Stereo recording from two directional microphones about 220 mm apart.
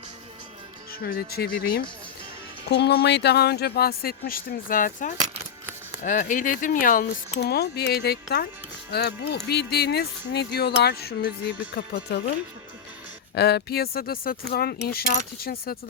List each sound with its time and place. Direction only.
0.9 s speech: 40° left (ahead or behind)
13.3 s speech: 50° left (ahead or behind)